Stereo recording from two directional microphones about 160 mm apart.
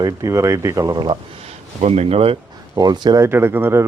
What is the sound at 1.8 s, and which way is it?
Speech, 40° right (ahead or behind).